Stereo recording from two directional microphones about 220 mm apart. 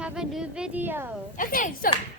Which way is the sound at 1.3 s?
40° left (ahead or behind).